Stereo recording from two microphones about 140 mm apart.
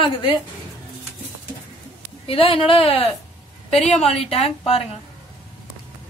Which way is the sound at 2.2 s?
40° left (ahead or behind).